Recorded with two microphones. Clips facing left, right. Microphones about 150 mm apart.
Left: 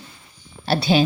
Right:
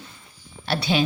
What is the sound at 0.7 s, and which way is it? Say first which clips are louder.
Speech: left 5 dB; 35° left (ahead or behind).